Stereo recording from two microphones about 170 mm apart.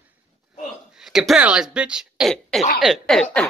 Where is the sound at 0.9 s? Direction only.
Centre (ahead or behind).